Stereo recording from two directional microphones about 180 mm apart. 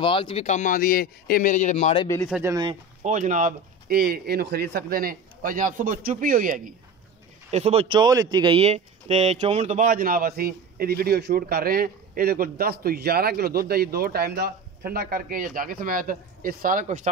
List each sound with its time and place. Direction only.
0.0 s speech: 30° left (ahead or behind)
2.4 s speech: 20° right (ahead or behind)
3.0 s speech: 45° right (ahead or behind)
7.5 s speech: 35° right (ahead or behind)